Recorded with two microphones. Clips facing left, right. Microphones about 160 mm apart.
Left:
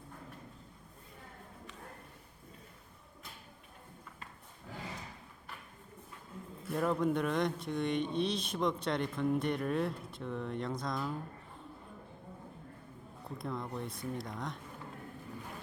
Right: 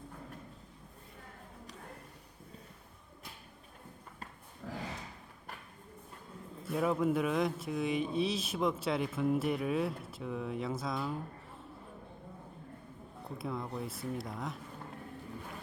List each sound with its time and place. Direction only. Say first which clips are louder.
4.6 s a sound: right 6 dB; 60° right (ahead or behind)
6.7 s speech: right 1 dB; 5° right (ahead or behind)
13.4 s speech: right 1 dB; 5° right (ahead or behind)